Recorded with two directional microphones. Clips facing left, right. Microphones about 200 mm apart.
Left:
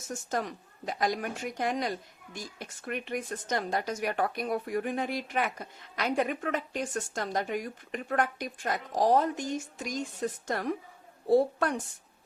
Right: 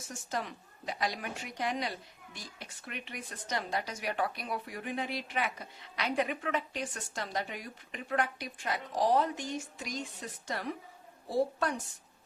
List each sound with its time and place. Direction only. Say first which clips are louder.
0.1 s a woman's voice: left 5 dB; 45° left (ahead or behind)